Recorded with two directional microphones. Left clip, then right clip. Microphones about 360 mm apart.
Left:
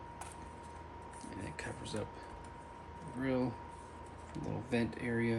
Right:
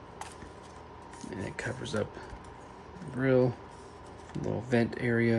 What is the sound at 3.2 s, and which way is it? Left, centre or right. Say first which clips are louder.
Speech: right 10 dB; centre.